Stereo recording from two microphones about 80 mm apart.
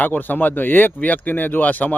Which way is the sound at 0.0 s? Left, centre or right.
Left.